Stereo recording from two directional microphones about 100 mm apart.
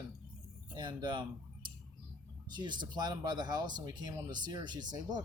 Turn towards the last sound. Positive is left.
turn(degrees=-45)  # may be behind; listen again after turning